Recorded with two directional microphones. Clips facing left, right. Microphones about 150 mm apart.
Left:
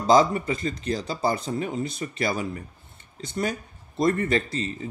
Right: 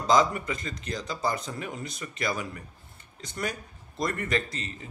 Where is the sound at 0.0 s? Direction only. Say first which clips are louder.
Left 4 dB; 30° left (ahead or behind).